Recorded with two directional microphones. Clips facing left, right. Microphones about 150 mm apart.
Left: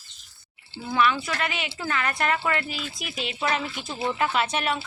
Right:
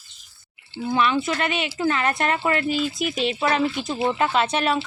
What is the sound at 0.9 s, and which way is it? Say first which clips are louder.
Speech: right 3 dB; 20° right (ahead or behind).